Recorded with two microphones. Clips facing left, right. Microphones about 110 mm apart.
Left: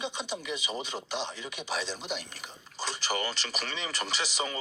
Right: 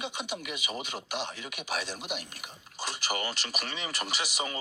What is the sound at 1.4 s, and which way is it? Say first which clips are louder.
Speech: left 1 dB; 45° right (ahead or behind).